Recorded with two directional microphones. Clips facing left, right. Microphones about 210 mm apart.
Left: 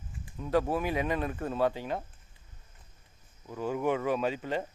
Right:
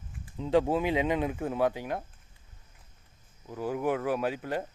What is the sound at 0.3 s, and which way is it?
Speech, 20° right (ahead or behind).